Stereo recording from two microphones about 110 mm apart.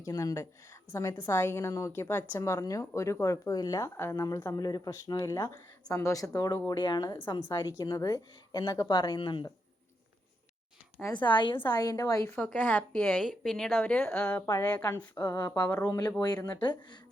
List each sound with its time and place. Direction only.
0.0 s a woman's voice: 30° left (ahead or behind)
11.2 s a woman's voice: 45° left (ahead or behind)
12.3 s a woman's voice: 15° left (ahead or behind)
13.1 s a woman's voice: centre (ahead or behind)
15.2 s speech: 45° left (ahead or behind)
15.5 s a woman's voice: 15° left (ahead or behind)
15.8 s a woman's voice: 35° left (ahead or behind)